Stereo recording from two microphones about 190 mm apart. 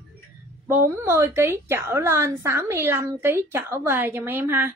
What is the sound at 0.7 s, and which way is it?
A woman's voice, 10° right (ahead or behind).